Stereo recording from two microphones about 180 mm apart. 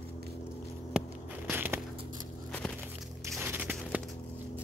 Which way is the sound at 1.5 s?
10° right (ahead or behind).